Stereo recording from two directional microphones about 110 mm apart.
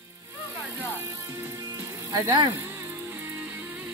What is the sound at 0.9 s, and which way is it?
Music, 20° right (ahead or behind).